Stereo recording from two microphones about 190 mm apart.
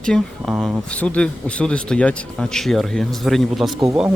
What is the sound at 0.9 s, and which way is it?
Speech, 5° left (ahead or behind).